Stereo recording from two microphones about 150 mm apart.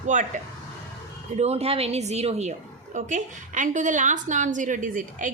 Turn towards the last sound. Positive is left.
turn(degrees=-60)  # may be behind; listen again after turning